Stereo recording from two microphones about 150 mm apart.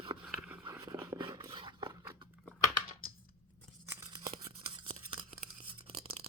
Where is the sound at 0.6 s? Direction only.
30° right (ahead or behind).